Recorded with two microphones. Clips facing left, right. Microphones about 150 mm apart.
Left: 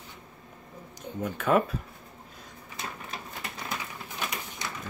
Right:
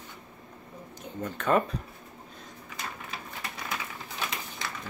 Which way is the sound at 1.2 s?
10° left (ahead or behind).